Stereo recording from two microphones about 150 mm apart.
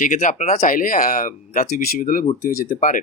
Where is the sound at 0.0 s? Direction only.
65° left (ahead or behind).